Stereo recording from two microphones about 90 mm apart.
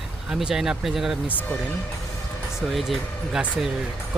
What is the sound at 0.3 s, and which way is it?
Speech, 5° right (ahead or behind).